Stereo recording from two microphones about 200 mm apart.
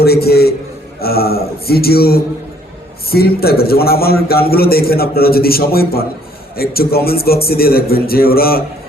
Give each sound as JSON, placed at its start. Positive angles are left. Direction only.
{"t": 0.0, "sound": "a man's voice", "side_deg": 50}